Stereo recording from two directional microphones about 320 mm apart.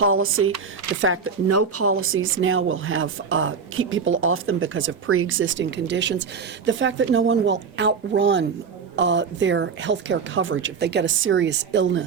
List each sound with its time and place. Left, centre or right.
0.0 s speech: right